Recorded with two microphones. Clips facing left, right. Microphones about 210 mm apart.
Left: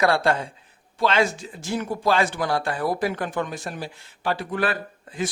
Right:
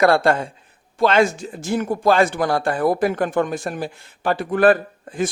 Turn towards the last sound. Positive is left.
turn(degrees=-50)  # may be behind; listen again after turning